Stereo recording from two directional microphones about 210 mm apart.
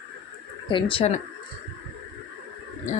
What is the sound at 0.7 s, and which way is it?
Speech, 25° left (ahead or behind).